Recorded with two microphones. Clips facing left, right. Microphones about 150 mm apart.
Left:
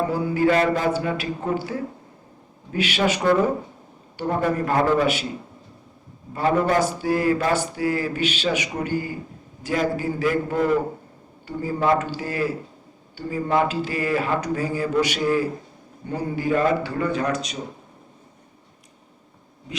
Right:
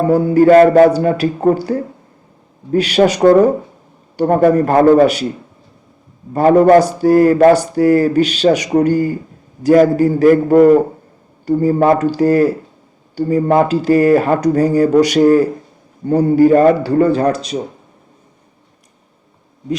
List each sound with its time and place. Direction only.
0.3 s speech: 45° right (ahead or behind)
0.9 s speech: 40° right (ahead or behind)
6.3 s speech: 40° right (ahead or behind)